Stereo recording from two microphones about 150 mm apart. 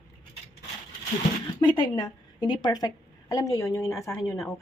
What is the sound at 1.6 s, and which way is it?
A woman's voice, 30° left (ahead or behind).